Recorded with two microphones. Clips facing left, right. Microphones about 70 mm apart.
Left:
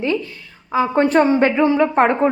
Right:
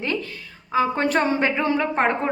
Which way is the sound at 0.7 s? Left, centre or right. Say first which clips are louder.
Left 5 dB; left.